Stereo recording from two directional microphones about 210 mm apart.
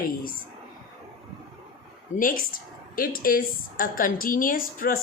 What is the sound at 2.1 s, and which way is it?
Speech, 40° left (ahead or behind).